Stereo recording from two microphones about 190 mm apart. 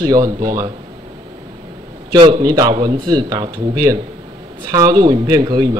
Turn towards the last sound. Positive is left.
turn(degrees=-20)  # may be behind; listen again after turning